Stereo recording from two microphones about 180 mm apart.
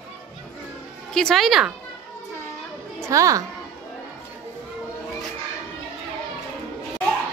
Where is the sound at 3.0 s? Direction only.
15° right (ahead or behind).